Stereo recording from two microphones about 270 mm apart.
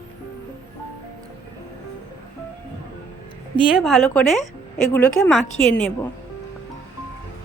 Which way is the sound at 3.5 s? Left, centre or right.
Centre.